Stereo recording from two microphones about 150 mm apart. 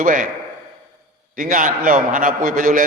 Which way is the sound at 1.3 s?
65° right (ahead or behind).